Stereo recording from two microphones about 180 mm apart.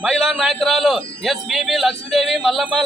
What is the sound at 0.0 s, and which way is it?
A man's voice, centre (ahead or behind).